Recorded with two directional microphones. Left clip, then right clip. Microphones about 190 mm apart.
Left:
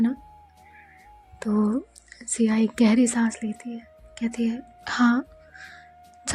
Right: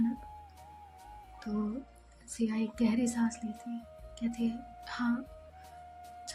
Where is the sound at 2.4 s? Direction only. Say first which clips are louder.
Left 11 dB; 40° left (ahead or behind).